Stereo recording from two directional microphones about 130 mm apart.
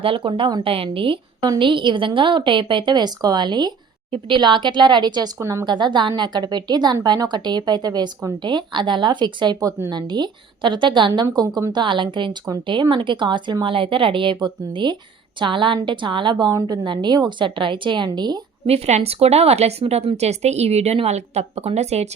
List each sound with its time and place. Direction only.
0.0 s a woman's voice: 40° right (ahead or behind); by 5.6 s 25° right (ahead or behind)
5.6 s a woman's voice: 35° right (ahead or behind)
18.6 s speech: 55° right (ahead or behind)